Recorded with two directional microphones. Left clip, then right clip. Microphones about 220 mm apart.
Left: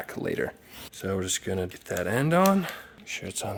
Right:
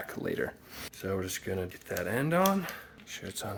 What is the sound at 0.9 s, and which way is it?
Speech, 45° left (ahead or behind).